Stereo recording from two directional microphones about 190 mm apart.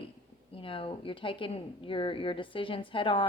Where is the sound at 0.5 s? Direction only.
30° left (ahead or behind).